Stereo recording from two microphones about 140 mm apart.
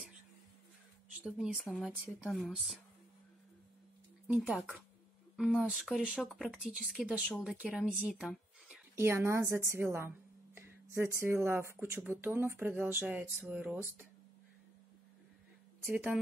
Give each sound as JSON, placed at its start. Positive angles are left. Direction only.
{"t": 1.1, "sound": "speech", "side_deg": -5}
{"t": 4.3, "sound": "speech", "side_deg": -10}
{"t": 8.9, "sound": "a woman's voice", "side_deg": -20}